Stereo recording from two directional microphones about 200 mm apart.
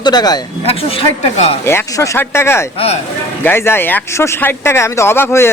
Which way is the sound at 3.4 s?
10° left (ahead or behind).